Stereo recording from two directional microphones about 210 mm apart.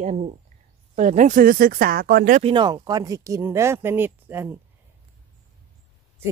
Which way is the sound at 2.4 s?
25° right (ahead or behind).